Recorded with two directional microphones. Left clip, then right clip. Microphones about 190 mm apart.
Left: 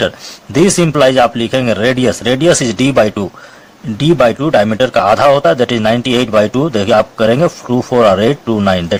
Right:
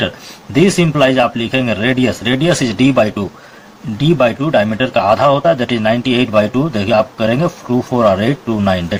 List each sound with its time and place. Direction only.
0.5 s a man's voice: 50° left (ahead or behind)